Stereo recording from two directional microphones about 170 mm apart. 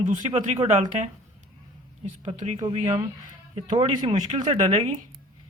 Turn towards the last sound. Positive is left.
turn(degrees=-35)  # may be behind; listen again after turning